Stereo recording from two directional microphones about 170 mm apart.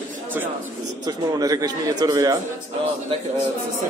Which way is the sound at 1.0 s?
20° right (ahead or behind).